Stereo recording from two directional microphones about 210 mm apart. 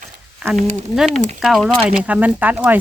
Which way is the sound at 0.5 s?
Centre (ahead or behind).